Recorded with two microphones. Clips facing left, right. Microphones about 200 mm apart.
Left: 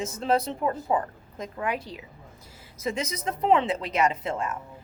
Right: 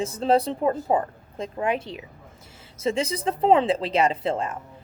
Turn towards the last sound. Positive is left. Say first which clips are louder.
# right 4 dB
turn(degrees=-30)  # may be behind; listen again after turning